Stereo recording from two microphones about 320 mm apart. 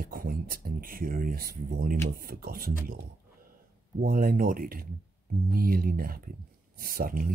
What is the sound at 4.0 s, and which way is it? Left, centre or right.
Speech, right.